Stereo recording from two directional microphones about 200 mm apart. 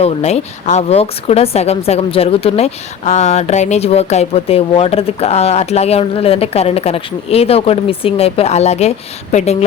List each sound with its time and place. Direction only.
0.0 s speech: 30° left (ahead or behind)